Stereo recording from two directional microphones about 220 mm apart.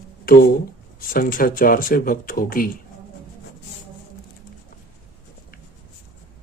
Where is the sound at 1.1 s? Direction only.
40° left (ahead or behind).